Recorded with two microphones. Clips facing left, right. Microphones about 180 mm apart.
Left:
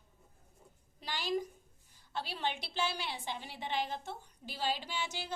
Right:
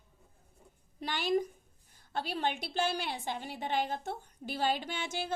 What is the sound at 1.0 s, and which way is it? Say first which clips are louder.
A woman's voice: right 5 dB; 55° right (ahead or behind).